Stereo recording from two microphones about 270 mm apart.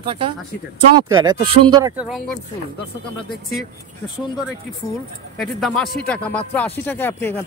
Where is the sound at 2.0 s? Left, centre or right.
Centre.